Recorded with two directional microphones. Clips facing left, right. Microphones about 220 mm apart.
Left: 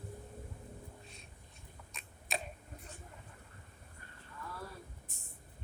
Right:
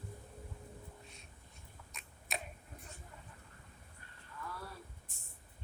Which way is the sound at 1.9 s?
30° left (ahead or behind).